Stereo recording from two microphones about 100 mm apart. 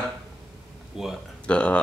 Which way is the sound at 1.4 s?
10° left (ahead or behind).